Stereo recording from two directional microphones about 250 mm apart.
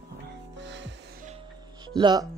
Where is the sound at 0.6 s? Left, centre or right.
Right.